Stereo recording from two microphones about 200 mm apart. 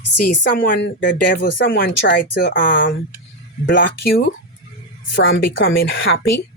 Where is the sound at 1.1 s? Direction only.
60° left (ahead or behind).